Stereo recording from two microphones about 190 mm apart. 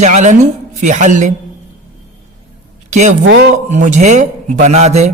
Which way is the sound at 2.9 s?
40° right (ahead or behind).